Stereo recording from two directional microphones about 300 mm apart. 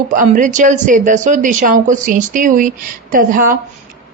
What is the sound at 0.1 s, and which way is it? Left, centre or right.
A woman's voice, right.